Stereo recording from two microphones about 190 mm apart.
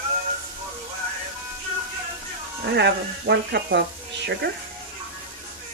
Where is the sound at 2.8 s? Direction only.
65° right (ahead or behind).